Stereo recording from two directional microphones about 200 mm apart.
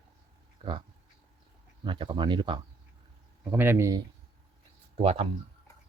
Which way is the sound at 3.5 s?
10° right (ahead or behind).